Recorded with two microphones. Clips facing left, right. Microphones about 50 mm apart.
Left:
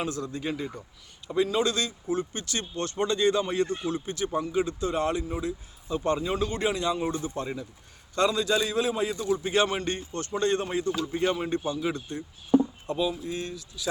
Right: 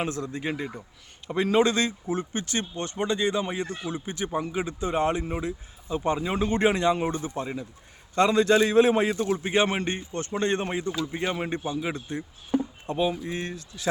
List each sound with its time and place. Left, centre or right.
0.0 s a man's voice: right
1.3 s a man's voice: right
5.9 s a man's voice: centre; by 13.8 s right